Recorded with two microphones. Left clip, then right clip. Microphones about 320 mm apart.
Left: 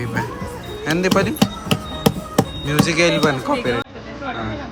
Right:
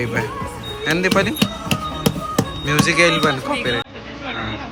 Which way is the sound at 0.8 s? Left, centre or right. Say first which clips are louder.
Right 1 dB; centre.